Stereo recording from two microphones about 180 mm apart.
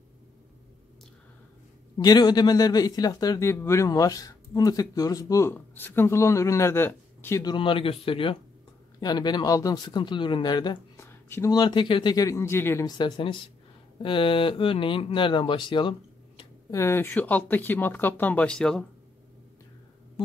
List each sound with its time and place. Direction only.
2.0 s speech: 25° left (ahead or behind)
7.5 s speech: 30° left (ahead or behind)
11.0 s speech: 15° left (ahead or behind)
16.7 s speech: 15° left (ahead or behind)